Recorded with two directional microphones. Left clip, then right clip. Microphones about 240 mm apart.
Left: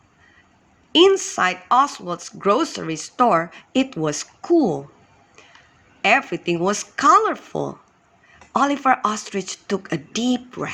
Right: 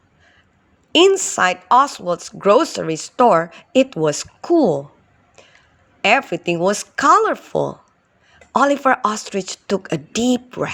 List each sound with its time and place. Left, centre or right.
0.9 s speech: right
6.0 s speech: right